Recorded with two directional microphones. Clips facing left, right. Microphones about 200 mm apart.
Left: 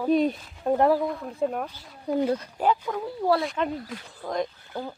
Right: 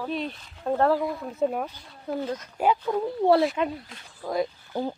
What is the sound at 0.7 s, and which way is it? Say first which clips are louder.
Speech: left 2 dB; 15° left (ahead or behind).